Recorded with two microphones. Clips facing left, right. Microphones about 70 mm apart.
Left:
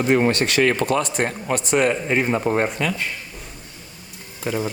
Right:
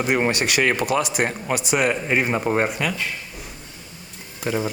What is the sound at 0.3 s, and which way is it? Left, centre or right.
Speech, centre.